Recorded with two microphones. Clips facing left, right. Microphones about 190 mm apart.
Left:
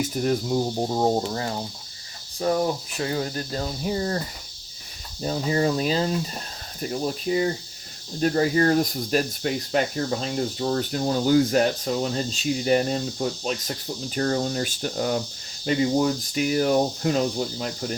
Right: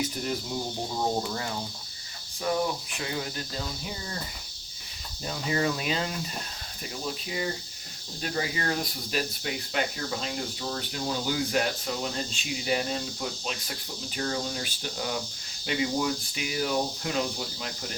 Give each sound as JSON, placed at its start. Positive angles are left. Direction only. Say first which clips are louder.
{"t": 0.0, "sound": "speech", "louder": "left 7 dB", "side_deg": 45}
{"t": 1.1, "sound": "speech", "louder": "left 5 dB", "side_deg": 35}
{"t": 5.2, "sound": "speech", "louder": "left 5 dB", "side_deg": 35}